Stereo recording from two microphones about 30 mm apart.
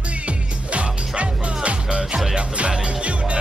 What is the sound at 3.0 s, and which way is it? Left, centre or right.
Music, right.